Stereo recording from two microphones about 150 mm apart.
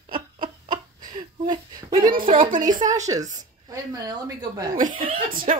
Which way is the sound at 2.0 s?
65° right (ahead or behind).